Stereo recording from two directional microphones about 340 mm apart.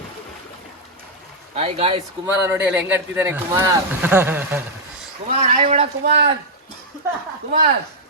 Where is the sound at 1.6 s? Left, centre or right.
Centre.